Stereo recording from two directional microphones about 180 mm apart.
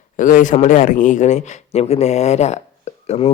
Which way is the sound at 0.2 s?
45° left (ahead or behind).